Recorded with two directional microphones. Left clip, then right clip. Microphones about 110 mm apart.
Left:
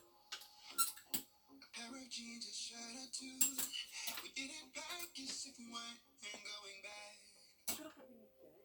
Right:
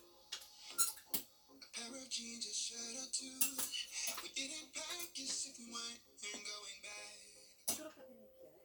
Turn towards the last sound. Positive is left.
turn(degrees=-25)  # may be behind; listen again after turning